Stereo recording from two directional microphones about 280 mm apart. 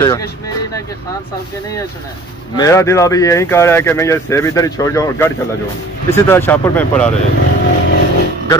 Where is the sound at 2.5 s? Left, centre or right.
Centre.